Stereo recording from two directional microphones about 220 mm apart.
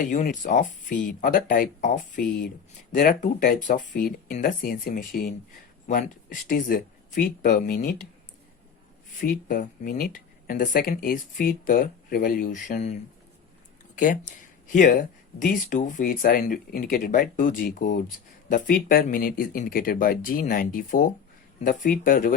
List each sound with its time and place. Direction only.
0.0 s speech: 35° left (ahead or behind)
9.2 s speech: 40° left (ahead or behind)